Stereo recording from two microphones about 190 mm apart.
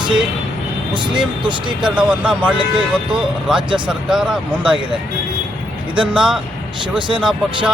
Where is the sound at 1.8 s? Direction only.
5° right (ahead or behind).